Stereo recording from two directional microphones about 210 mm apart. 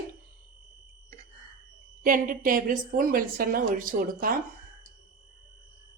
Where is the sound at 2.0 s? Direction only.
40° right (ahead or behind).